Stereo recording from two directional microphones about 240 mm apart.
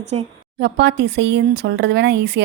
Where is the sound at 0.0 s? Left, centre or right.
Right.